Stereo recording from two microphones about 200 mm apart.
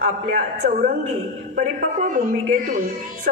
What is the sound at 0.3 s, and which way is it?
A woman's voice, 45° right (ahead or behind).